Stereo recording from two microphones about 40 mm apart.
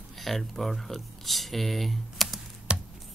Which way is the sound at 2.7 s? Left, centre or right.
Right.